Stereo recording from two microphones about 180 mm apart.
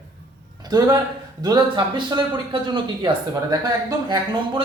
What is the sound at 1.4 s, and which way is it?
Speech, 25° right (ahead or behind).